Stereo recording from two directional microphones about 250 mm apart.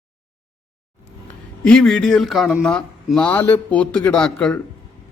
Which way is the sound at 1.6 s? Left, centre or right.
Centre.